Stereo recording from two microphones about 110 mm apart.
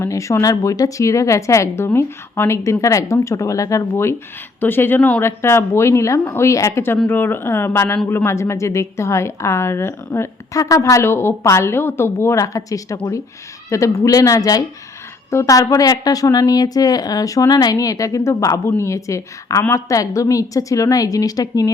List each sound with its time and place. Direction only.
0.0 s a woman's voice: 30° left (ahead or behind)